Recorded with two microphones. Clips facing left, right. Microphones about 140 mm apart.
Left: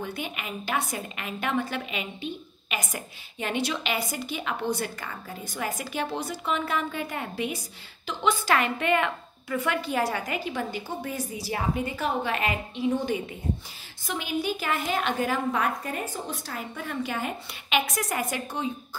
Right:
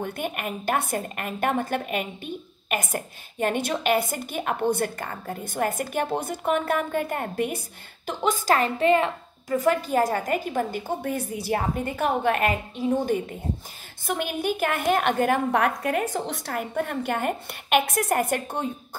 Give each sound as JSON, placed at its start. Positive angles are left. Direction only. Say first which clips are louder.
{"t": 0.0, "sound": "a woman's voice", "louder": "right 4 dB", "side_deg": -50}